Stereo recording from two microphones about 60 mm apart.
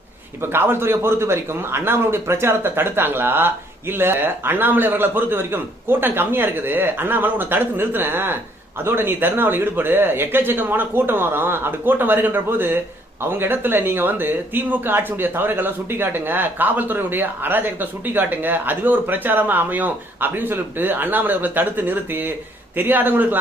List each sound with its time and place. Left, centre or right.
0.4 s speech: right